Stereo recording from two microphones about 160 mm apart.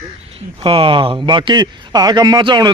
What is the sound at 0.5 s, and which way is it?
A man's voice, 35° right (ahead or behind).